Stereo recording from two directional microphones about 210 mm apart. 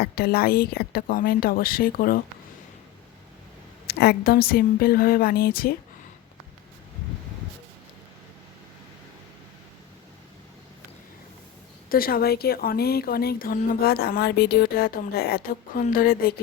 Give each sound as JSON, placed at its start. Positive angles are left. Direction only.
{"t": 0.0, "sound": "speech", "side_deg": 45}
{"t": 3.8, "sound": "speech", "side_deg": 50}
{"t": 11.9, "sound": "speech", "side_deg": 45}